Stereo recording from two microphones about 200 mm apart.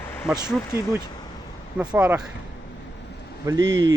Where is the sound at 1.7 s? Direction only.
10° right (ahead or behind).